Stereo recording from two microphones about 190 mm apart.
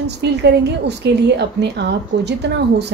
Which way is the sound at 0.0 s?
65° right (ahead or behind).